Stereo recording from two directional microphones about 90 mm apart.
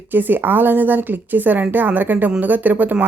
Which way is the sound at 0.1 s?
20° right (ahead or behind).